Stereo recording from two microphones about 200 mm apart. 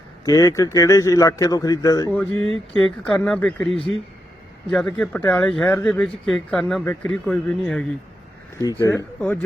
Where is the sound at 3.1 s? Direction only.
5° left (ahead or behind).